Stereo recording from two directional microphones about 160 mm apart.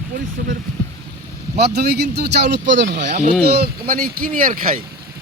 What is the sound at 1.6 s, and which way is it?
Speech, 90° right.